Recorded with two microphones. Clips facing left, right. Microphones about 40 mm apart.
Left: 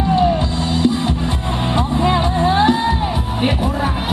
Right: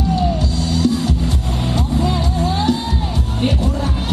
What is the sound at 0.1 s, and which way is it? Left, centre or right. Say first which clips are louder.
Music: left 5 dB; left.